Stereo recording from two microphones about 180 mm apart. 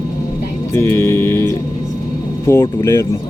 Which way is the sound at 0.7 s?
15° left (ahead or behind).